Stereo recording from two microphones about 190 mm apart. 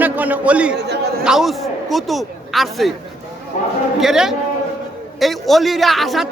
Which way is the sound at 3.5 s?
45° left (ahead or behind).